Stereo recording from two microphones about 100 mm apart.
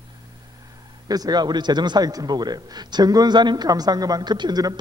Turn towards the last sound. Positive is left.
turn(degrees=-45)  # may be behind; listen again after turning